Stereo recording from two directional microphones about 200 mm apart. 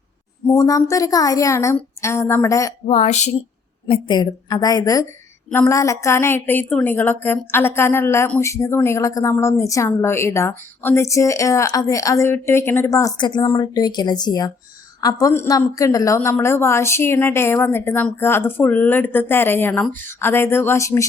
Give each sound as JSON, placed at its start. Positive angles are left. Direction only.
{"t": 0.4, "sound": "a woman's voice", "side_deg": 15}
{"t": 2.8, "sound": "a woman's voice", "side_deg": 35}
{"t": 3.8, "sound": "a woman's voice", "side_deg": 25}